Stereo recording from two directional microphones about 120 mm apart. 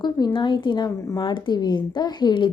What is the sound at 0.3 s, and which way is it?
A woman's voice, 40° left (ahead or behind).